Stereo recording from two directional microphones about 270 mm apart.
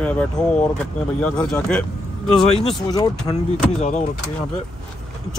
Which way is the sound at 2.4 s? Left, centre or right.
Left.